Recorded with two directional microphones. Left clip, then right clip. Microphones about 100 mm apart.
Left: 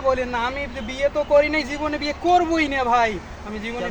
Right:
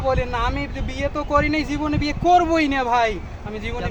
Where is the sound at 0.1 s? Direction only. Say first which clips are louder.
Even; 35° right (ahead or behind).